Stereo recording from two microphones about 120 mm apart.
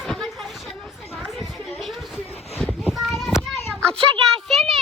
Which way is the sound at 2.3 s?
60° left (ahead or behind).